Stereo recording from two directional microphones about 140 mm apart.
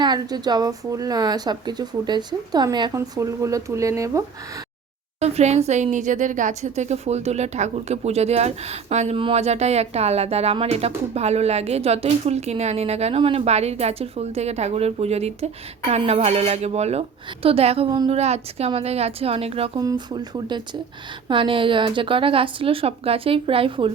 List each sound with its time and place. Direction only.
0.0 s a woman's voice: 30° right (ahead or behind)
5.2 s speech: 50° right (ahead or behind)
19.8 s a woman's voice: 30° right (ahead or behind)